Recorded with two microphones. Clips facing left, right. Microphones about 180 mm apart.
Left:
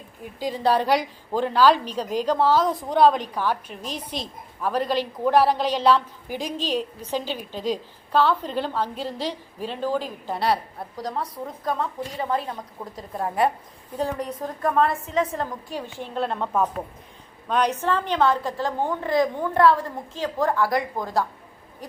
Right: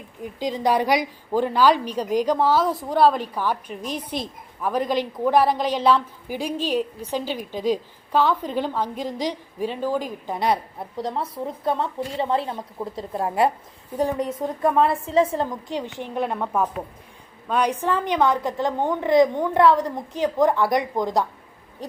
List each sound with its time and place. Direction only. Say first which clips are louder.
0.3 s a woman's voice: even; 15° right (ahead or behind)